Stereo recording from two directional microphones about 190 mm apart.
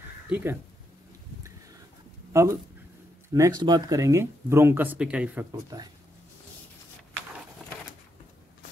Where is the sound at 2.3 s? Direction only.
15° right (ahead or behind).